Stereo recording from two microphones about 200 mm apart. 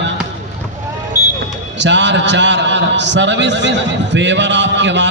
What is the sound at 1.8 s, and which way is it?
A man's voice, 65° right (ahead or behind).